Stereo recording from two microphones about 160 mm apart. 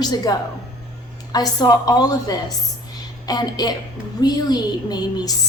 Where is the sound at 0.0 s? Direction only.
25° left (ahead or behind).